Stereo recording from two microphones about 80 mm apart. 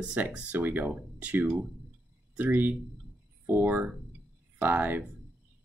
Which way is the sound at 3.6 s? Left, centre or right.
Centre.